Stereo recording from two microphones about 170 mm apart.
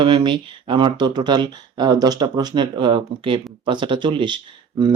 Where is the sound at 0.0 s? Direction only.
30° right (ahead or behind).